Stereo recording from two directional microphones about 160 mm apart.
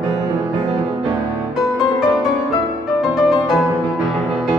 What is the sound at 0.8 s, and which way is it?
Music, 30° right (ahead or behind).